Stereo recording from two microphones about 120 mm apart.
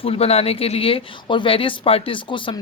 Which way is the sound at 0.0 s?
55° left (ahead or behind).